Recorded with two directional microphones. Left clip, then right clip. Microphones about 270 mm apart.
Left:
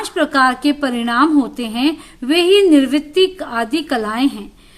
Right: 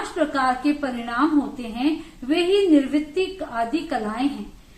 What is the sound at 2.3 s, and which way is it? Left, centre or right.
A woman's voice, left.